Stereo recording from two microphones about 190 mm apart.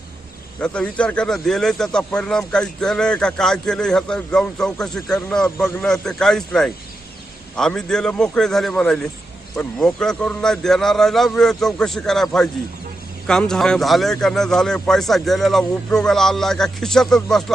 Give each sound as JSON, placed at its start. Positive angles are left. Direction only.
{"t": 0.6, "sound": "speech", "side_deg": 5}